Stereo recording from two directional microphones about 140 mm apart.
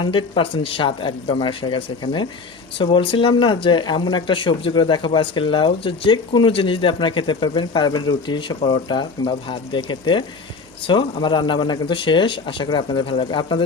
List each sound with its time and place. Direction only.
0.0 s speech: 35° left (ahead or behind)